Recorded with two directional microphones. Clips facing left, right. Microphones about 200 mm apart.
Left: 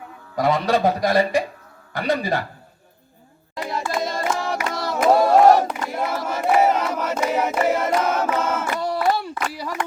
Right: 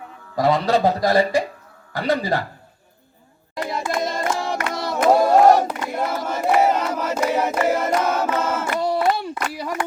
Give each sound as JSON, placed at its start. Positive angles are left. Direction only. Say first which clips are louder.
{"t": 0.3, "sound": "a man's voice", "louder": "right 1 dB", "side_deg": 15}
{"t": 3.6, "sound": "hands", "louder": "right 1 dB", "side_deg": 0}
{"t": 3.9, "sound": "music", "louder": "even", "side_deg": 0}
{"t": 4.8, "sound": "crowd", "louder": "even", "side_deg": 0}
{"t": 8.8, "sound": "a sound", "louder": "right 2 dB", "side_deg": -25}